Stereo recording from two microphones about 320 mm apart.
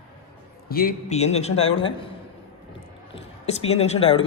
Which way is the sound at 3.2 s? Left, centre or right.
Centre.